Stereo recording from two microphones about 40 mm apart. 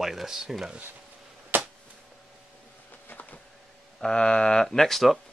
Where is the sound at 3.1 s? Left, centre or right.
Left.